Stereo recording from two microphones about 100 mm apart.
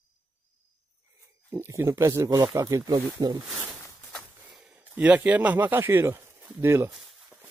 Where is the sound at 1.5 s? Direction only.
25° right (ahead or behind); by 3.3 s 40° right (ahead or behind).